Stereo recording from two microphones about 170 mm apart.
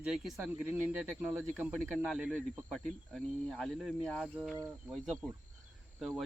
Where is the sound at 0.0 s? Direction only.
Centre (ahead or behind).